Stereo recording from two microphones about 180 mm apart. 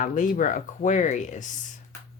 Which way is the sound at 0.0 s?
45° left (ahead or behind).